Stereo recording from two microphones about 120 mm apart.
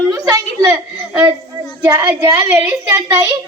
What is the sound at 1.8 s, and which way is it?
Speech, 35° right (ahead or behind).